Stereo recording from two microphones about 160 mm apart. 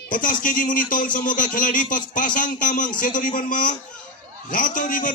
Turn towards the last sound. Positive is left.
turn(degrees=55)  # may be behind; listen again after turning